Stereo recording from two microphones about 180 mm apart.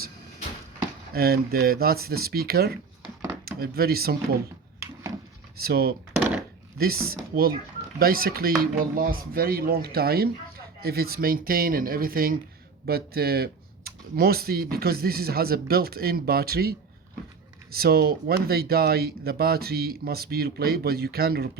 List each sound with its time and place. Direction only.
1.1 s speech: 60° right (ahead or behind)
5.5 s speech: 60° right (ahead or behind)